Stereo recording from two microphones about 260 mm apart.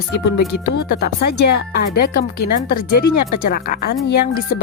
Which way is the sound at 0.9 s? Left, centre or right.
Left.